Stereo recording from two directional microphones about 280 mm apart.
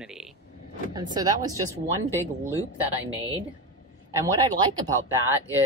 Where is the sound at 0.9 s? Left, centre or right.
Centre.